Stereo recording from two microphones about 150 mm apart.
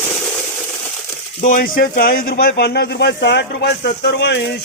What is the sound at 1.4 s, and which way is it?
Speech, 60° left (ahead or behind).